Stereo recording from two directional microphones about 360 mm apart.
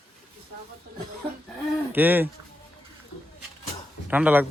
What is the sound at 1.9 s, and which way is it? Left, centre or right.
Speech, centre.